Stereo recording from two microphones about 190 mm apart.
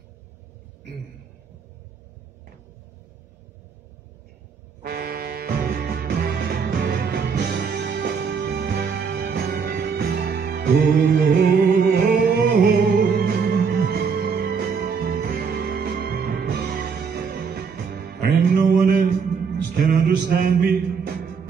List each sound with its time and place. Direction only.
4.8 s music: 55° right (ahead or behind)